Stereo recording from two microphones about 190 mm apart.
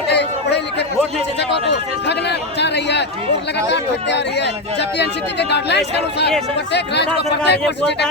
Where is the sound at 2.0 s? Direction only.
65° left (ahead or behind).